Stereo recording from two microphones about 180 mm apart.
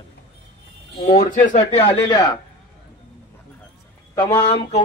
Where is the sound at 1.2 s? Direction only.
50° left (ahead or behind).